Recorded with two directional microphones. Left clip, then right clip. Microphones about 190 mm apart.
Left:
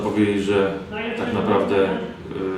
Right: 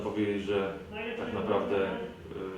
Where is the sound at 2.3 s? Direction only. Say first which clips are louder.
Left 12 dB; 35° left (ahead or behind).